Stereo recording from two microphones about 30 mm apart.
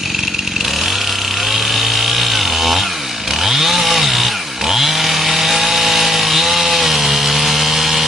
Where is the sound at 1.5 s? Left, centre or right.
Centre.